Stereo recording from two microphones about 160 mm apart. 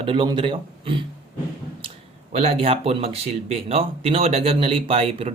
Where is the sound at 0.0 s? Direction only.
35° right (ahead or behind).